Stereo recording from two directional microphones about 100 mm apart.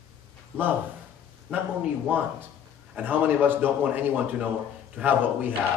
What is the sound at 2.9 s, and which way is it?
A man's voice, 20° right (ahead or behind).